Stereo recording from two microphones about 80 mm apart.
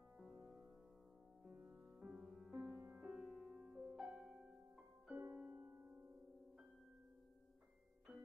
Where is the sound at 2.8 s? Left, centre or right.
Right.